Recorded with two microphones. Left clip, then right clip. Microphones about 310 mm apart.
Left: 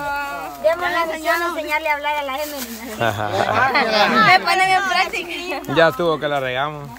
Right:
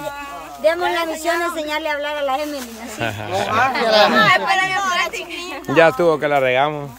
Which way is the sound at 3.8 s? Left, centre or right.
Right.